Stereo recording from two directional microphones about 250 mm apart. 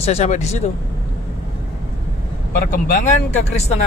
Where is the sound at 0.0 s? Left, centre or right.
Left.